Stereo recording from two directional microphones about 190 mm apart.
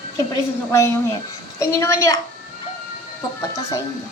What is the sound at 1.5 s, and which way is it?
Speech, 15° left (ahead or behind).